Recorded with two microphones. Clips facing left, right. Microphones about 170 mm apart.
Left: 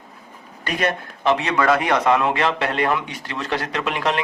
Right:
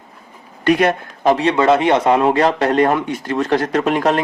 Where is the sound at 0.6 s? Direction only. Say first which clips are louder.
Right 9 dB; 65° right (ahead or behind).